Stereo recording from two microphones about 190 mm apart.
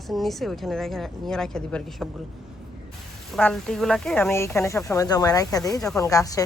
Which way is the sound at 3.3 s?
Centre (ahead or behind).